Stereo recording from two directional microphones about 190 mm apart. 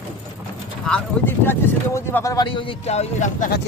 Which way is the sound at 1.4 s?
15° left (ahead or behind).